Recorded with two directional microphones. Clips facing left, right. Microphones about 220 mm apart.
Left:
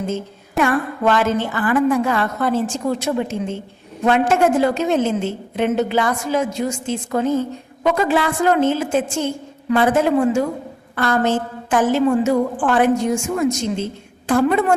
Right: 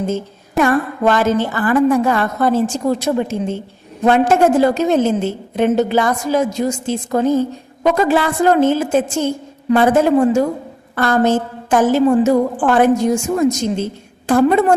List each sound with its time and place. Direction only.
0.6 s a woman's voice: 40° right (ahead or behind)